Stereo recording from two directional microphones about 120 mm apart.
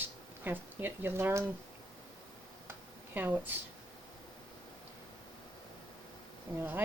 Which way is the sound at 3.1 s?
15° right (ahead or behind).